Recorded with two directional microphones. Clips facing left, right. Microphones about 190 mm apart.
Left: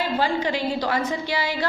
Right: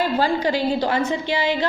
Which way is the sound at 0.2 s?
35° right (ahead or behind).